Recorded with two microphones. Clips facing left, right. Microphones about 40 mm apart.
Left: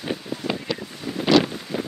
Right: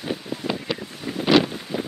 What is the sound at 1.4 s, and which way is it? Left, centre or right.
Wind noise, centre.